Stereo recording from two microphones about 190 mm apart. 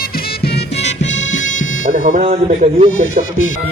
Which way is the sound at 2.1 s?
40° right (ahead or behind).